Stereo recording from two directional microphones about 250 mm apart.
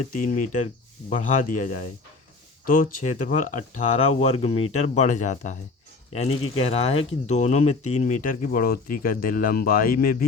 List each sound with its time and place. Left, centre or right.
0.1 s speech: left